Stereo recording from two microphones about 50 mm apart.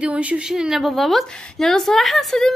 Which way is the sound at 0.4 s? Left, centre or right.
Centre.